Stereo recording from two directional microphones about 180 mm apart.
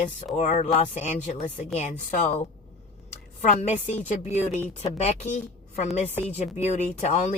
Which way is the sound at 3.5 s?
40° left (ahead or behind).